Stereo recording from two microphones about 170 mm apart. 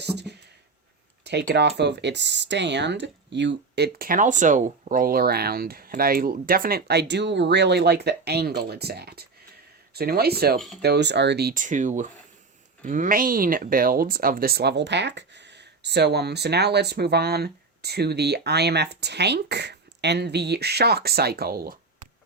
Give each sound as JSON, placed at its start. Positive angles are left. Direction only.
{"t": 0.0, "sound": "speech", "side_deg": -75}
{"t": 10.8, "sound": "speech", "side_deg": -80}